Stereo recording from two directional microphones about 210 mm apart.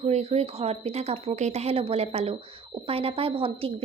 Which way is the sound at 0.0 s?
30° right (ahead or behind).